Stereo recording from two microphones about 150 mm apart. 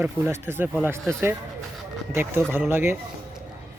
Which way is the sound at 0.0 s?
15° right (ahead or behind).